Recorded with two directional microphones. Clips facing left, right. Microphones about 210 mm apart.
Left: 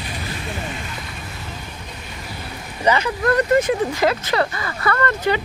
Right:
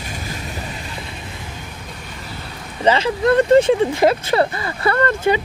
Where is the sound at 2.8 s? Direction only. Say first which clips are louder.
Right 3 dB; 25° right (ahead or behind).